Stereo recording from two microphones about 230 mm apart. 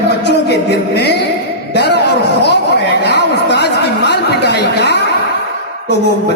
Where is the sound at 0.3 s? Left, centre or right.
Left.